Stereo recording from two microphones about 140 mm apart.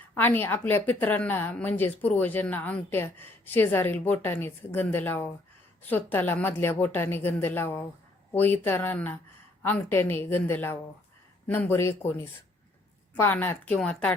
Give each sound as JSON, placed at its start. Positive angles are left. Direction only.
{"t": 0.1, "sound": "a woman's voice", "side_deg": 15}